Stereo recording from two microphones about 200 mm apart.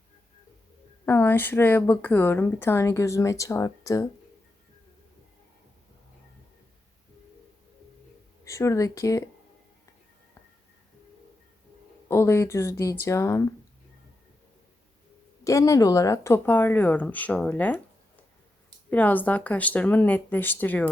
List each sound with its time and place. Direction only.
1.0 s speech: 10° left (ahead or behind)
8.4 s speech: 15° left (ahead or behind)
12.0 s speech: 15° left (ahead or behind)
15.4 s speech: 15° left (ahead or behind)
18.9 s speech: 10° left (ahead or behind)